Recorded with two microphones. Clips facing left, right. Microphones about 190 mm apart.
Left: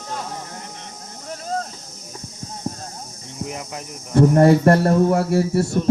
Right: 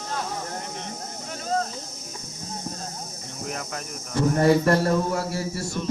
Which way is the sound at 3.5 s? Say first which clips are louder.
Right 2 dB; 15° left (ahead or behind).